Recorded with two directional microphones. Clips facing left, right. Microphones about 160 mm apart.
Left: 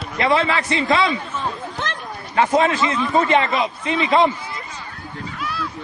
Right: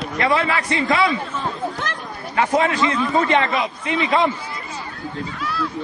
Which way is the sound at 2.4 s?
25° left (ahead or behind).